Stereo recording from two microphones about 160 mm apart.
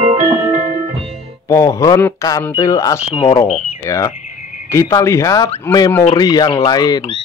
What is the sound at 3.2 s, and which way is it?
Speech, 40° left (ahead or behind).